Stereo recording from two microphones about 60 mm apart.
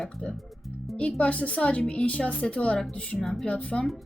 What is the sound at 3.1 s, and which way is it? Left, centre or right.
Speech, centre.